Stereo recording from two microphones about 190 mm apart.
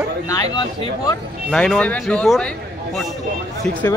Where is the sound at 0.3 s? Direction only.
20° left (ahead or behind).